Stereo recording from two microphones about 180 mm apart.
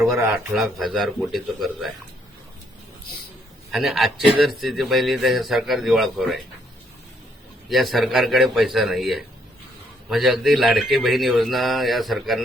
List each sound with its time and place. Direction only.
0.3 s speech: centre (ahead or behind)
3.7 s a man's voice: centre (ahead or behind)
7.7 s speech: centre (ahead or behind)